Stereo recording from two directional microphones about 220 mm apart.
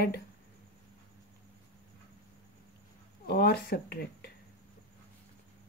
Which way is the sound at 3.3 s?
45° left (ahead or behind).